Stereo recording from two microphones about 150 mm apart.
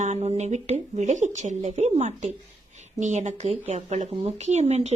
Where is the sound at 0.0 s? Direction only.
45° right (ahead or behind).